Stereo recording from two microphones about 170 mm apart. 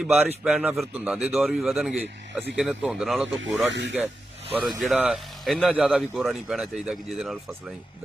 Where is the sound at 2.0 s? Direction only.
75° right (ahead or behind).